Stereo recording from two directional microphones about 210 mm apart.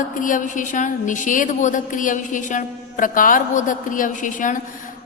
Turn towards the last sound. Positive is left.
turn(degrees=40)  # may be behind; listen again after turning